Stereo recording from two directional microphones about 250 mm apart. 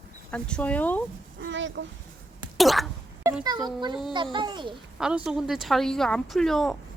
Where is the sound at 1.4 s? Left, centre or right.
Right.